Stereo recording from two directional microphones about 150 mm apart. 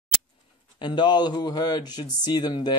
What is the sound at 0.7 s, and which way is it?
Speech, 30° left (ahead or behind).